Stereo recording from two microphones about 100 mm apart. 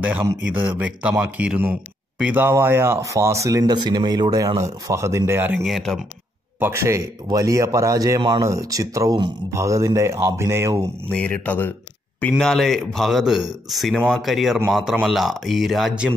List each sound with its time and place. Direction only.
0.4 s a man's voice: 10° right (ahead or behind)
2.3 s speech: 20° right (ahead or behind)
3.7 s speech: 45° right (ahead or behind); by 5.6 s 20° right (ahead or behind)
5.7 s speech: 5° left (ahead or behind)
6.6 s speech: 30° right (ahead or behind)
11.1 s speech: 10° left (ahead or behind)
12.4 s speech: 5° left (ahead or behind)